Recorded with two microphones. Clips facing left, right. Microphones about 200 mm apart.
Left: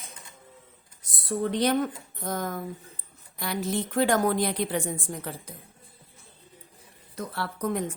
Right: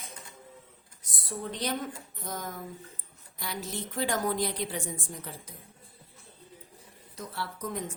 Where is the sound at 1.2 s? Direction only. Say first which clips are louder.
Left 9 dB; 65° left (ahead or behind).